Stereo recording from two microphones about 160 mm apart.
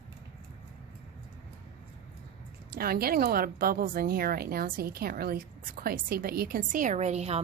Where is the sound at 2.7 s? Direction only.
70° right (ahead or behind); by 7.4 s 40° right (ahead or behind).